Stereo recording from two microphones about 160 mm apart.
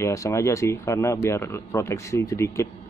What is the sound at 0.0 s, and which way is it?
Speech, 20° left (ahead or behind).